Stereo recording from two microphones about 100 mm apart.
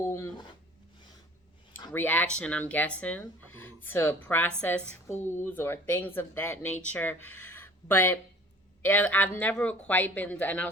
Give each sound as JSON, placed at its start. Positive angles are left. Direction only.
{"t": 1.9, "sound": "speech", "side_deg": 20}